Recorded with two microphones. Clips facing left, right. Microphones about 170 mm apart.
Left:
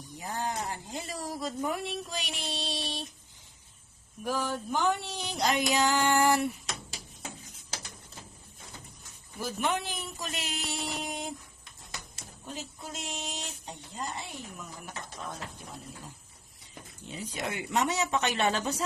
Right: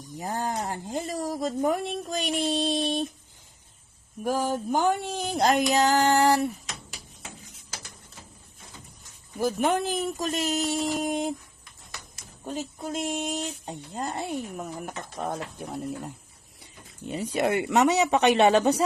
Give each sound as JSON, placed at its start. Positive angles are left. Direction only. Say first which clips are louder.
{"t": 0.0, "sound": "speech", "louder": "right 4 dB", "side_deg": -45}
{"t": 4.2, "sound": "speech", "louder": "right 5 dB", "side_deg": -45}
{"t": 9.4, "sound": "speech", "louder": "right 7 dB", "side_deg": -50}
{"t": 12.5, "sound": "speech", "louder": "right 9 dB", "side_deg": -50}